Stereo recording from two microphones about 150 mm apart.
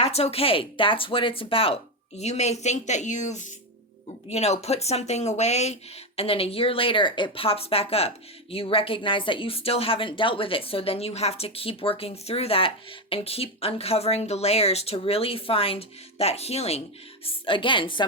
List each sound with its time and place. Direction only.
0.0 s speech: 40° left (ahead or behind)